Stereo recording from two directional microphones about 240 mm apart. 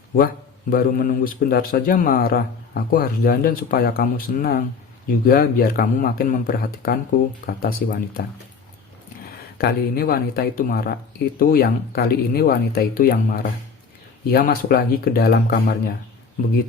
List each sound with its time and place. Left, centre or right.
0.7 s a man's voice: left
9.6 s a man's voice: left